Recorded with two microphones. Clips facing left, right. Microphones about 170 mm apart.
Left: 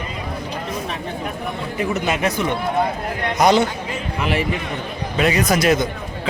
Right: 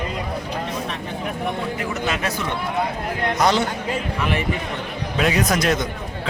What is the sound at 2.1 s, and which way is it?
A man's voice, 15° left (ahead or behind).